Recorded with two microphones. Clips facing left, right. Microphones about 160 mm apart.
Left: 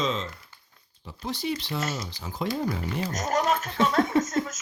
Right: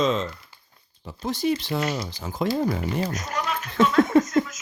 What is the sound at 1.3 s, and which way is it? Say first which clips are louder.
Speech: right 6 dB; 45° right (ahead or behind).